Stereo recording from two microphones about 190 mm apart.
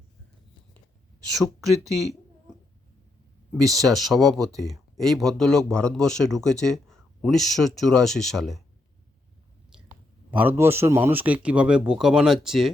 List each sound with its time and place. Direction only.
1.4 s speech: 15° right (ahead or behind)
3.6 s speech: 20° right (ahead or behind)
3.9 s speech: centre (ahead or behind)
10.3 s speech: 10° right (ahead or behind)